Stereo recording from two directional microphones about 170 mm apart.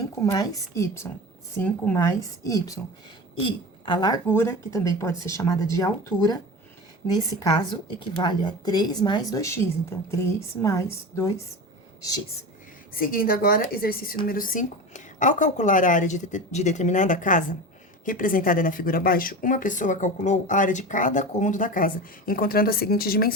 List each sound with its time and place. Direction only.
0.2 s a woman's voice: 20° left (ahead or behind)
4.3 s speech: 15° left (ahead or behind)
13.0 s a woman's voice: 55° left (ahead or behind)